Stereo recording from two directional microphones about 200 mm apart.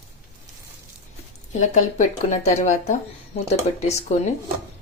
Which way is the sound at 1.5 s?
35° left (ahead or behind).